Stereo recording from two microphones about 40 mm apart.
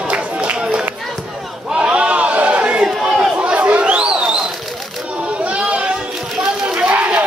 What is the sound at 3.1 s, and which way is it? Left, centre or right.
Chatter, right.